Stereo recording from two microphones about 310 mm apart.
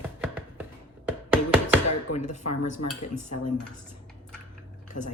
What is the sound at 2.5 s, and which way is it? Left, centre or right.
Dishes, left.